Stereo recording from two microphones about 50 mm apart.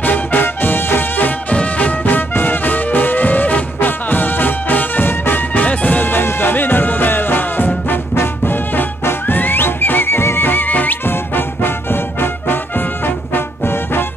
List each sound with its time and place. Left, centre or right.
0.0 s music: left